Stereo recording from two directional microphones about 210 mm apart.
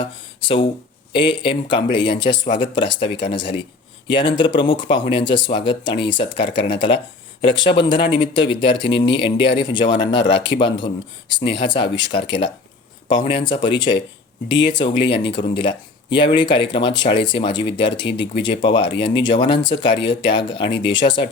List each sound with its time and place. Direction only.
0.0 s speech: 25° left (ahead or behind)